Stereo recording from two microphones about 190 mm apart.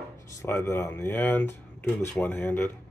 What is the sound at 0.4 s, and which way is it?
Speech, 15° left (ahead or behind).